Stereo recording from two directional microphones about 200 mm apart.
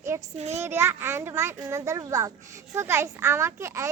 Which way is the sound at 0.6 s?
15° right (ahead or behind).